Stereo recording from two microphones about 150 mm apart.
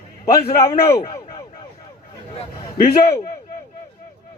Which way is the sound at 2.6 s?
45° left (ahead or behind).